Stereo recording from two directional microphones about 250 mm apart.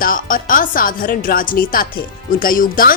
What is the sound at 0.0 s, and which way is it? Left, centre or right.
Speech, left.